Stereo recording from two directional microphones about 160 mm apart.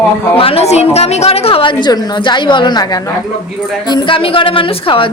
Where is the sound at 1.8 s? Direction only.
25° left (ahead or behind).